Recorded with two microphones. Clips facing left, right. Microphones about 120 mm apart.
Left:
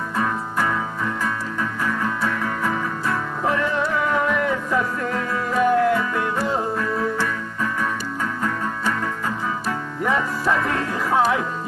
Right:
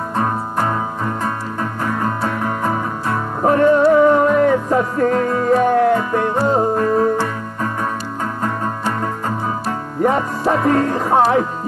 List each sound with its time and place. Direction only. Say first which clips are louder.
0.1 s music: right 4 dB; 40° right (ahead or behind)
11.1 s speech: right 5 dB; 45° right (ahead or behind)